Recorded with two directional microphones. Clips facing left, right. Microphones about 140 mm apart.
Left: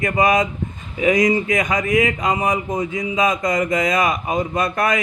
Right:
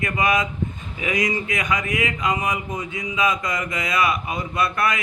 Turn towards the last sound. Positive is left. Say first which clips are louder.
# left 3 dB
turn(degrees=40)  # may be behind; listen again after turning